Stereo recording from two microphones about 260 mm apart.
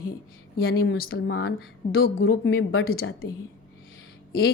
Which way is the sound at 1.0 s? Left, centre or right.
Left.